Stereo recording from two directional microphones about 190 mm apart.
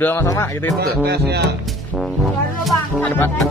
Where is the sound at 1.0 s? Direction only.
60° right (ahead or behind).